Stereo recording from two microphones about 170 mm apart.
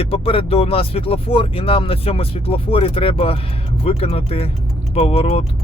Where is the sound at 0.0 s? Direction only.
35° left (ahead or behind).